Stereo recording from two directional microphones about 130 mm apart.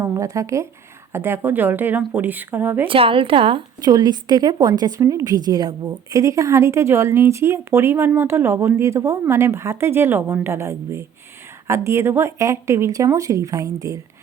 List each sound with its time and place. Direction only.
0.0 s a woman's voice: 25° right (ahead or behind)
2.8 s a woman's voice: 45° right (ahead or behind)
3.8 s a woman's voice: 30° right (ahead or behind)